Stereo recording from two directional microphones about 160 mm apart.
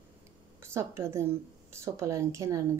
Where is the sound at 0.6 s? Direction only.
15° right (ahead or behind).